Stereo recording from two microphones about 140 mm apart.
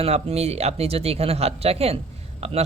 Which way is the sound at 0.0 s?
45° right (ahead or behind).